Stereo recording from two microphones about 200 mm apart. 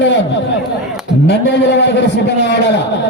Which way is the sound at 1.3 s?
60° left (ahead or behind).